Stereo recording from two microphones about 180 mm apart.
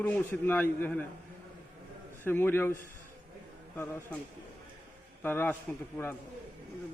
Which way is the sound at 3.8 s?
15° left (ahead or behind).